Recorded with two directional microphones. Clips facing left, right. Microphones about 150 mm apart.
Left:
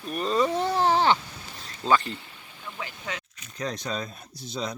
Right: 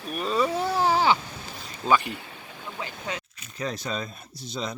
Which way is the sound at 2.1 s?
65° right (ahead or behind).